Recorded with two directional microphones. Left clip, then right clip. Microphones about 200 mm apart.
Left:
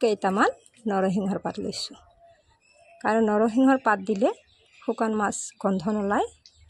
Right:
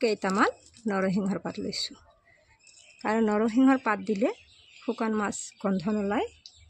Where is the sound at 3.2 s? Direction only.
10° left (ahead or behind).